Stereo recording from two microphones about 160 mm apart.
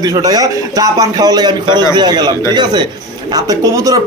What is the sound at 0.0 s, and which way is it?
A man's voice, 25° right (ahead or behind).